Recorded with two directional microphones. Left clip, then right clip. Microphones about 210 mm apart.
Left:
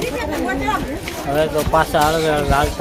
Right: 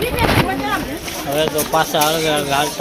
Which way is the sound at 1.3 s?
10° left (ahead or behind).